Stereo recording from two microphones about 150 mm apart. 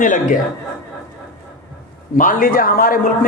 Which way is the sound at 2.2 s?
65° left (ahead or behind).